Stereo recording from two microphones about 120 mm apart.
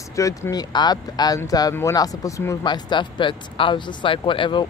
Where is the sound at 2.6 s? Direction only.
40° left (ahead or behind).